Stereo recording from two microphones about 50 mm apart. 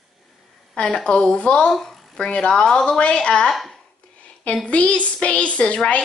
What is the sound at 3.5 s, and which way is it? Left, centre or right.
Speech, centre.